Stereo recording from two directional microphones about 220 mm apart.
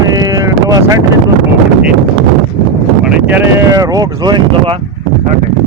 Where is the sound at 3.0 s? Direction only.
5° right (ahead or behind).